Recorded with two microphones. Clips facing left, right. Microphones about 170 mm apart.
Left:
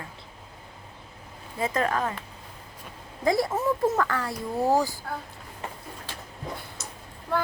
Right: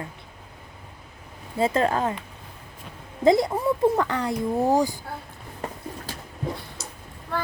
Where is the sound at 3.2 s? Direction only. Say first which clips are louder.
Right 4 dB; 20° right (ahead or behind).